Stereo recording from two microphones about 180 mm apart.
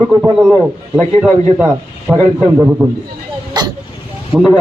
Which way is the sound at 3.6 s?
20° right (ahead or behind).